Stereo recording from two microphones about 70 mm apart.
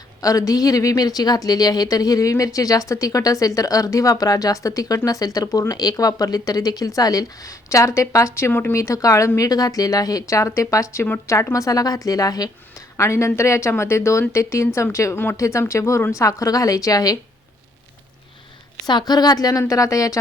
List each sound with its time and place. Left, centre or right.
0.2 s a woman's voice: left
8.7 s a woman's voice: left
12.7 s a woman's voice: left
18.9 s a woman's voice: left